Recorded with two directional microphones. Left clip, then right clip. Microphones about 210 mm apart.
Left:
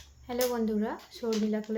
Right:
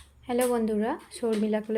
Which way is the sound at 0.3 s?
20° right (ahead or behind).